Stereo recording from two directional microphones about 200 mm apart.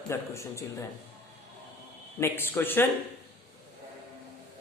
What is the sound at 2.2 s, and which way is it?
Speech, 10° left (ahead or behind).